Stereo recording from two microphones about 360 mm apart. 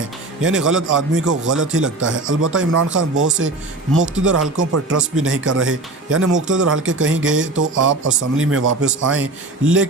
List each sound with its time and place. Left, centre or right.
0.0 s speech: right